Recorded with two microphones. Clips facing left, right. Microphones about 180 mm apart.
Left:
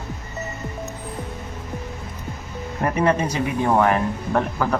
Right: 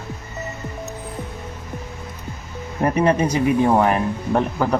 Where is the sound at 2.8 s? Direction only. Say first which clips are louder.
Right 3 dB; 20° right (ahead or behind).